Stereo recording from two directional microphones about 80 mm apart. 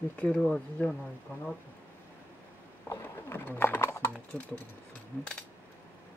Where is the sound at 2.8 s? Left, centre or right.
Left.